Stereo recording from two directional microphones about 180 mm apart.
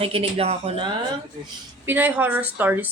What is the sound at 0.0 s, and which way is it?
Speech, 30° right (ahead or behind).